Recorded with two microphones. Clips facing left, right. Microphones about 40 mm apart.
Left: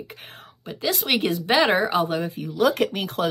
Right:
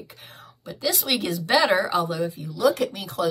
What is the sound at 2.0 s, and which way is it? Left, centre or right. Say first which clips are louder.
Speech: left 1 dB; left.